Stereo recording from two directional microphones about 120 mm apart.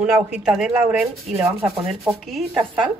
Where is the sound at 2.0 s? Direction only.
Centre (ahead or behind).